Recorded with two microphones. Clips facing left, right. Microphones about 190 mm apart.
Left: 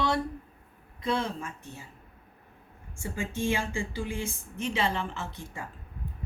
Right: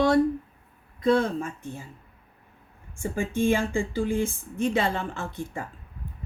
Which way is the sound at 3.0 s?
55° right (ahead or behind).